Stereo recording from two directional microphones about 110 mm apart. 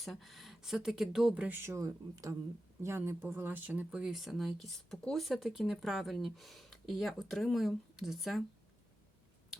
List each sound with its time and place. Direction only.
0.0 s speech: centre (ahead or behind)
1.5 s speech: 20° right (ahead or behind); by 8.4 s centre (ahead or behind)